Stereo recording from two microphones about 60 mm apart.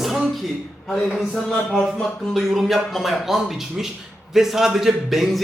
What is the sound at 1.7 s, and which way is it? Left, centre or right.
A man's voice, centre.